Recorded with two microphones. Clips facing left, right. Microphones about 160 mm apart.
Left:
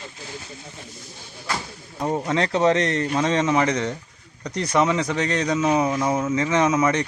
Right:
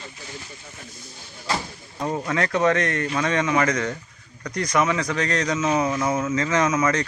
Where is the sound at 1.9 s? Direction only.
25° left (ahead or behind).